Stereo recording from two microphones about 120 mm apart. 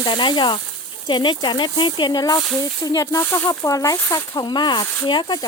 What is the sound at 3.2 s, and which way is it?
Speech, 20° left (ahead or behind).